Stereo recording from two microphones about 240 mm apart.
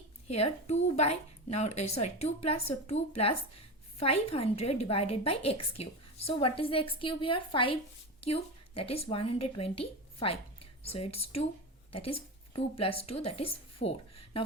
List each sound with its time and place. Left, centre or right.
0.3 s a woman's voice: left